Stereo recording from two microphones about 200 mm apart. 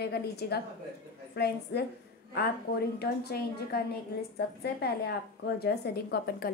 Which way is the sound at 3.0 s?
55° left (ahead or behind).